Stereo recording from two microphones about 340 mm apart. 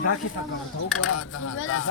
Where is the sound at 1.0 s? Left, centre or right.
Left.